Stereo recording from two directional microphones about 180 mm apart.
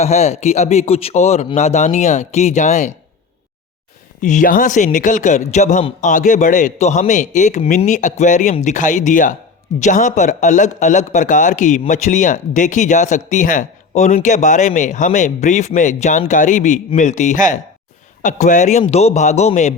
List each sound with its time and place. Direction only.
0.0 s speech: 35° left (ahead or behind)
4.2 s a man's voice: 45° left (ahead or behind)